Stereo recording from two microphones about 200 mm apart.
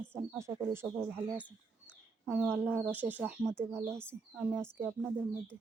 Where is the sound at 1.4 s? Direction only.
5° left (ahead or behind).